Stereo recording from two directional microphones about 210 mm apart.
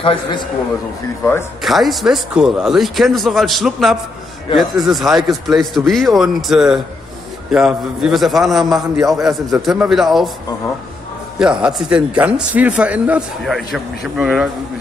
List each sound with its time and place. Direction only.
0.0 s a man's voice: 25° left (ahead or behind)
1.6 s speech: centre (ahead or behind)
11.3 s speech: 5° right (ahead or behind)